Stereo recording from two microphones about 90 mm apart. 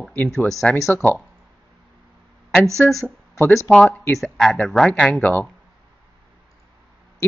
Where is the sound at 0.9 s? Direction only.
20° left (ahead or behind).